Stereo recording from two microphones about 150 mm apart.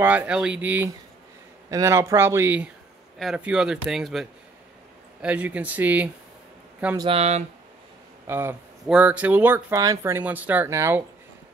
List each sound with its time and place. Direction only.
0.0 s speech: 10° right (ahead or behind)
7.1 s speech: 45° right (ahead or behind)
8.3 s speech: 15° right (ahead or behind)